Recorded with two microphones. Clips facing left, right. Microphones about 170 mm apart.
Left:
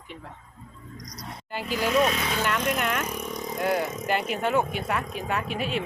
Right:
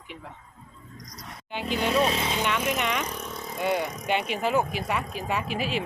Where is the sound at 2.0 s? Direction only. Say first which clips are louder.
Left 2 dB; 30° right (ahead or behind).